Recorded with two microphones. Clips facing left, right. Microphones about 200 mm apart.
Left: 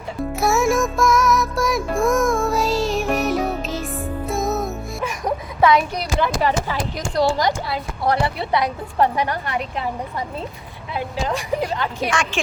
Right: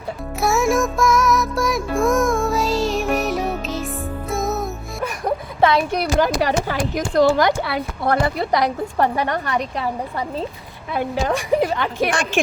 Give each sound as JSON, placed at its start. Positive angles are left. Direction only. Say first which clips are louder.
{"t": 0.3, "sound": "music", "louder": "even", "side_deg": 0}
{"t": 5.5, "sound": "speech", "louder": "left 1 dB", "side_deg": -30}
{"t": 6.1, "sound": "a woman's voice", "louder": "right 1 dB", "side_deg": -40}
{"t": 7.1, "sound": "a woman's voice", "louder": "right 4 dB", "side_deg": -55}
{"t": 10.9, "sound": "a woman's voice", "louder": "right 3 dB", "side_deg": -55}
{"t": 12.1, "sound": "a woman's voice", "louder": "right 1 dB", "side_deg": -35}